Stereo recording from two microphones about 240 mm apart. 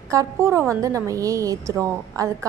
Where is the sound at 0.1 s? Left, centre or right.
Centre.